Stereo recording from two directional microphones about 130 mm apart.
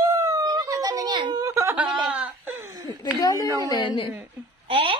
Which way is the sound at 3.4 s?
25° right (ahead or behind).